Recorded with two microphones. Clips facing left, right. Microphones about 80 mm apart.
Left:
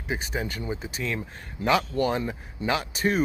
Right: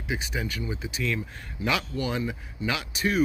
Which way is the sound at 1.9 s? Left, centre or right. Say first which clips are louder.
Left 4 dB; left.